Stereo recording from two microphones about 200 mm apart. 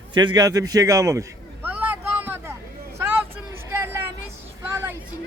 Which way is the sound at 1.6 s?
10° right (ahead or behind).